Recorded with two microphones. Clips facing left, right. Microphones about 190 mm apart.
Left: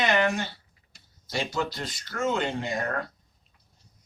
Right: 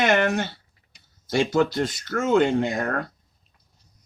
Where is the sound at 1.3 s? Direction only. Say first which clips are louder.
Right 9 dB; 55° right (ahead or behind).